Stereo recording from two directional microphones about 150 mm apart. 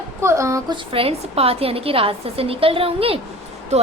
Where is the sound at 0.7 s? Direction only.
40° right (ahead or behind).